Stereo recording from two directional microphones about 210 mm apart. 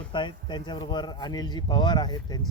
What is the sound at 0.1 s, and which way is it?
A man's voice, 20° left (ahead or behind).